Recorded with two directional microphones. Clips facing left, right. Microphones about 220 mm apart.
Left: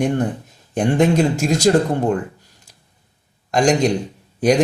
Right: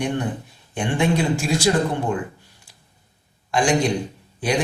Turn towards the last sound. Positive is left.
turn(degrees=40)  # may be behind; listen again after turning